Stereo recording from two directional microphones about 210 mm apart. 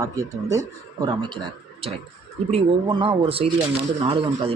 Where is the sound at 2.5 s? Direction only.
25° right (ahead or behind).